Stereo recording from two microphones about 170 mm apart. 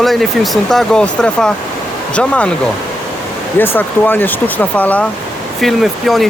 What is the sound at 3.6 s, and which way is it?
Speech, 10° left (ahead or behind).